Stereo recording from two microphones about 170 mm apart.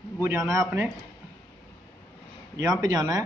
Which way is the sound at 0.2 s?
15° right (ahead or behind).